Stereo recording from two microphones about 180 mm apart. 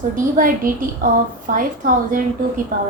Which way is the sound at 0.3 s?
50° right (ahead or behind).